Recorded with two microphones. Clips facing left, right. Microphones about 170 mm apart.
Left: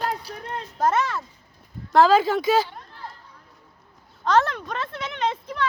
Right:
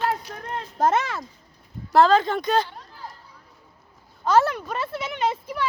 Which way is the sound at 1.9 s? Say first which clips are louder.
Left 1 dB; 5° left (ahead or behind).